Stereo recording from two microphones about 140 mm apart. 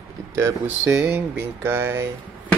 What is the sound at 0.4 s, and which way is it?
Speech, 20° right (ahead or behind).